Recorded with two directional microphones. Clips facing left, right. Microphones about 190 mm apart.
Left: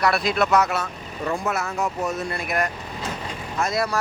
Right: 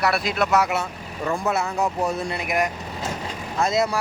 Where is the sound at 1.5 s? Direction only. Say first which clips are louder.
Right 2 dB; 30° right (ahead or behind).